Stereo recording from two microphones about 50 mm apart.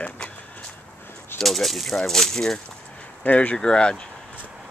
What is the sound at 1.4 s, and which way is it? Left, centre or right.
Speech, centre.